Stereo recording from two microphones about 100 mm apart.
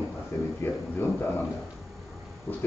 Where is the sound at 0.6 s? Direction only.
20° left (ahead or behind).